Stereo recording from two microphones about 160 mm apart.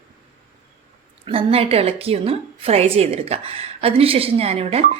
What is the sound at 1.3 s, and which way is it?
A woman's voice, 35° right (ahead or behind).